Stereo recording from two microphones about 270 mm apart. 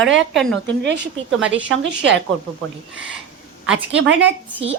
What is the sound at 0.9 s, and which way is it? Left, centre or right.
Speech, right.